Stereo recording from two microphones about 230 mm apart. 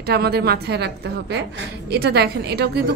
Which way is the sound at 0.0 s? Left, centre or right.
Right.